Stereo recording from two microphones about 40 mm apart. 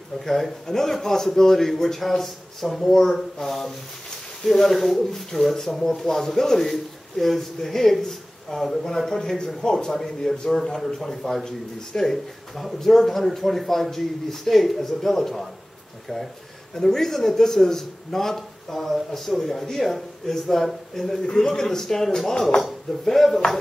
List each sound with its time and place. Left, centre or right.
0.2 s speech: centre
16.7 s speech: centre
21.3 s speech: centre